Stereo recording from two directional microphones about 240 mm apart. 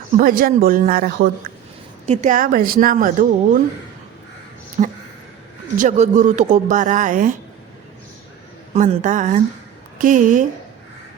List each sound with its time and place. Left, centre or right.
0.2 s speech: right
4.8 s speech: right
8.7 s speech: right